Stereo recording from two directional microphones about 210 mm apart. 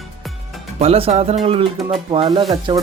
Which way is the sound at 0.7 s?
30° right (ahead or behind).